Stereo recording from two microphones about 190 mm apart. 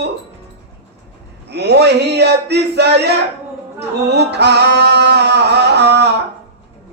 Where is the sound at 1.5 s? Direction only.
60° right (ahead or behind).